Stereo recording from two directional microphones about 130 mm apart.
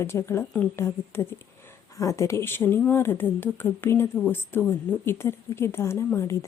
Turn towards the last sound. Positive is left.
turn(degrees=20)  # may be behind; listen again after turning